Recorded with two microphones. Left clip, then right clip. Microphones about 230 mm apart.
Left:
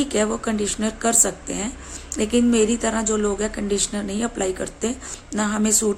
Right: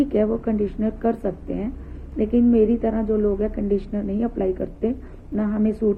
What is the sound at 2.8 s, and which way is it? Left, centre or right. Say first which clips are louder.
Speech: even; left.